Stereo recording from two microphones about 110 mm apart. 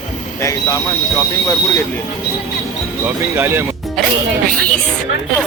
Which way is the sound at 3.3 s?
20° right (ahead or behind).